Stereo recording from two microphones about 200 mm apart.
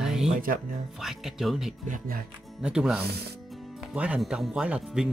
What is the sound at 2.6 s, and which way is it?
Speech, 5° right (ahead or behind).